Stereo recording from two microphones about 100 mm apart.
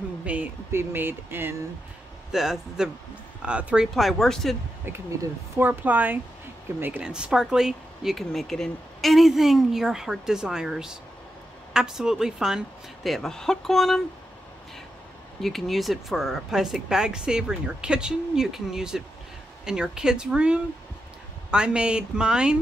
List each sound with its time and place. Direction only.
0.2 s a sound: 15° right (ahead or behind)
0.7 s speech: 20° right (ahead or behind)
2.3 s speech: 5° right (ahead or behind)
3.9 s speech: centre (ahead or behind)
4.8 s speech: 25° right (ahead or behind); by 14.0 s centre (ahead or behind)
15.4 s speech: centre (ahead or behind)